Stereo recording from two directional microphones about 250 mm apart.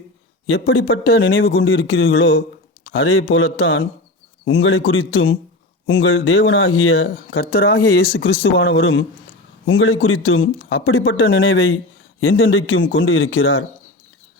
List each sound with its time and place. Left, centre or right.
0.7 s speech: left
1.0 s speech: left
7.4 s speech: left